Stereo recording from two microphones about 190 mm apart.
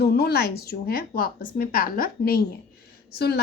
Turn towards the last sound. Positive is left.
turn(degrees=55)  # may be behind; listen again after turning